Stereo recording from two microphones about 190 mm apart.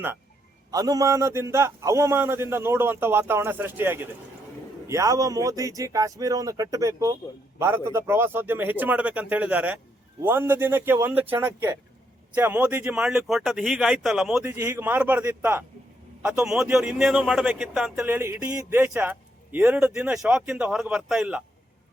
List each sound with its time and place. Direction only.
0.7 s speech: 20° right (ahead or behind); by 21.4 s centre (ahead or behind)